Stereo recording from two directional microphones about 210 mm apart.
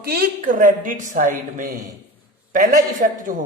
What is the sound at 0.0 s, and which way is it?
A woman's voice, 45° right (ahead or behind).